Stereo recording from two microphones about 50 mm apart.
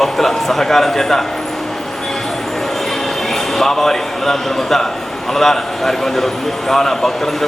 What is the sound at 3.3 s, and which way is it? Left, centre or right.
A man's voice, centre.